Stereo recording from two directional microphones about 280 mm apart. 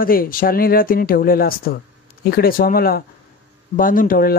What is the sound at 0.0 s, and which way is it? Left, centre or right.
Speech, left.